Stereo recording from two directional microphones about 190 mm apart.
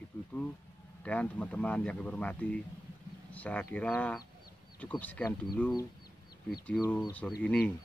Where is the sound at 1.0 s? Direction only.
5° left (ahead or behind).